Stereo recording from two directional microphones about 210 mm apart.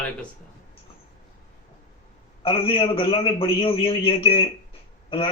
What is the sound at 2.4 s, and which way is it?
A man's voice, 25° left (ahead or behind).